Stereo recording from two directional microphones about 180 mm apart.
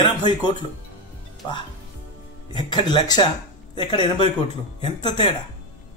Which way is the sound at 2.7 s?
25° left (ahead or behind).